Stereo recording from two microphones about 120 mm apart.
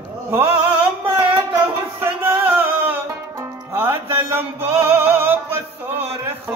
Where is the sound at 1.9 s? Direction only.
15° right (ahead or behind).